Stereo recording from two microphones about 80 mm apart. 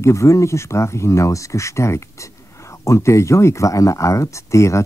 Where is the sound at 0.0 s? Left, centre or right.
Left.